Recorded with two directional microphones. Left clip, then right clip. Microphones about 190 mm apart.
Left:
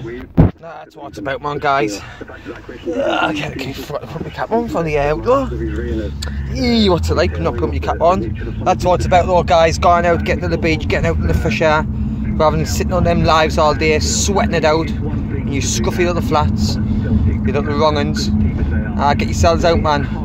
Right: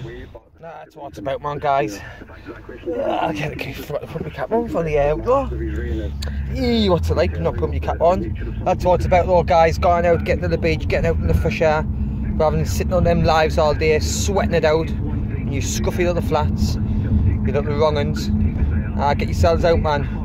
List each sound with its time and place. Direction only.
1.2 s speech: 5° right (ahead or behind)
2.9 s speech: 20° right (ahead or behind)
4.5 s speech: centre (ahead or behind)
6.5 s speech: 10° right (ahead or behind)